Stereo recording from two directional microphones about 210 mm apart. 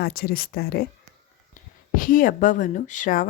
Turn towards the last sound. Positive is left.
turn(degrees=40)  # may be behind; listen again after turning